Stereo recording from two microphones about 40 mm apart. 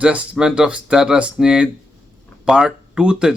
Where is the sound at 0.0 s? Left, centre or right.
Right.